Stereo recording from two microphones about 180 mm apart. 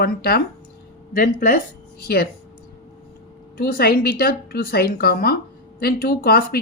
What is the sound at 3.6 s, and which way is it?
Speech, 55° left (ahead or behind).